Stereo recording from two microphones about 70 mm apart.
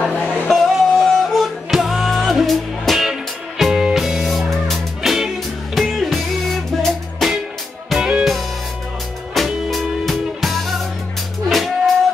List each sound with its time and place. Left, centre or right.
0.0 s music: left
0.5 s music: centre